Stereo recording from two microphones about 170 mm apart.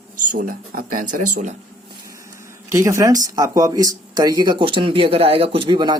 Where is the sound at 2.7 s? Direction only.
15° right (ahead or behind).